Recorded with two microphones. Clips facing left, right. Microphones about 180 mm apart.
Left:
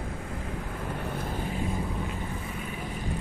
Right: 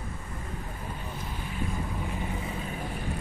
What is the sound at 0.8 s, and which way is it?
Vehicle, 70° left (ahead or behind).